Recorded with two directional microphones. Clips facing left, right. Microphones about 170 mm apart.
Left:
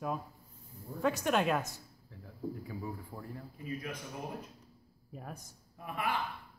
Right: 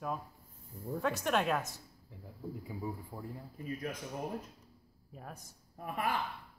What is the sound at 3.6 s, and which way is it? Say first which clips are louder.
Speech: right 1 dB; 40° right (ahead or behind).